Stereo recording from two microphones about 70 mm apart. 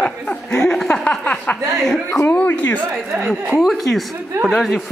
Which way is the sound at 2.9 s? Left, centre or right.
Right.